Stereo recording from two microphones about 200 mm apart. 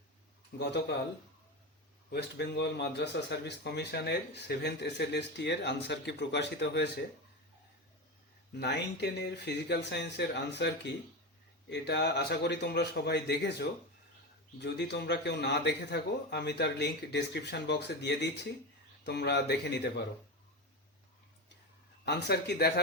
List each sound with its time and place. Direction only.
0.6 s a man's voice: 60° left (ahead or behind)
2.0 s a man's voice: 55° left (ahead or behind)
8.5 s a man's voice: 55° left (ahead or behind)
22.0 s a man's voice: 55° left (ahead or behind)